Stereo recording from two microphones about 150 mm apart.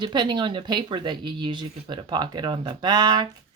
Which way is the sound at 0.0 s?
30° right (ahead or behind).